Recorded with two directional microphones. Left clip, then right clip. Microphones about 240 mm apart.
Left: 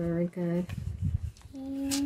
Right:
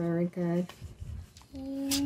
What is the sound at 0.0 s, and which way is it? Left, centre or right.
Speech, centre.